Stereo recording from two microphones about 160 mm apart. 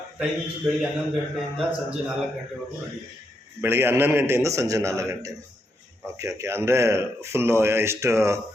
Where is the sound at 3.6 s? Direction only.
15° right (ahead or behind).